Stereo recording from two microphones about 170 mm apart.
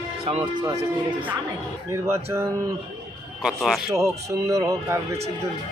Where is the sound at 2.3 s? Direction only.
20° right (ahead or behind).